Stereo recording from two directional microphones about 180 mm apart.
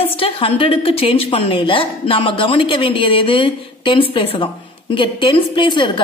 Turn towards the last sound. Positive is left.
turn(degrees=25)  # may be behind; listen again after turning